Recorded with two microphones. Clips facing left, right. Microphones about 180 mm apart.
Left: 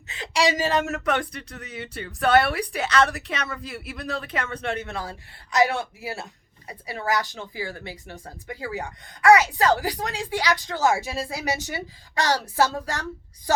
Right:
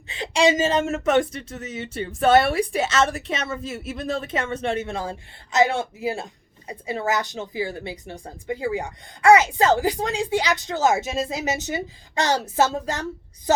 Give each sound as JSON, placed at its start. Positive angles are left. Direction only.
{"t": 0.1, "sound": "speech", "side_deg": -25}